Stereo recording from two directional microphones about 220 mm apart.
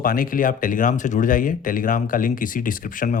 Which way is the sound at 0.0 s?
40° left (ahead or behind).